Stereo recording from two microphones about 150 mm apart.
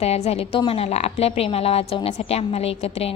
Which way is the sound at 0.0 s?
45° left (ahead or behind).